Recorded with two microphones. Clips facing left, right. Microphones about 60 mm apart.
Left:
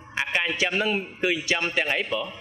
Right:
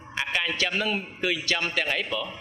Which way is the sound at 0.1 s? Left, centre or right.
Centre.